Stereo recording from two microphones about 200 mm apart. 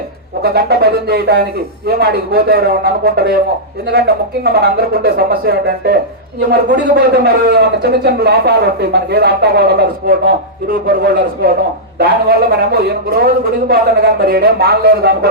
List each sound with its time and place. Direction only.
0.4 s speech: 55° right (ahead or behind)